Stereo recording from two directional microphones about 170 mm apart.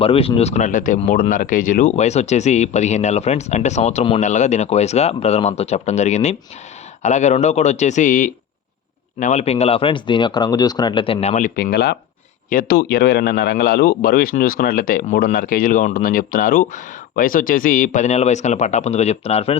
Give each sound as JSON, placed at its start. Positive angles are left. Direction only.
{"t": 0.0, "sound": "speech", "side_deg": 35}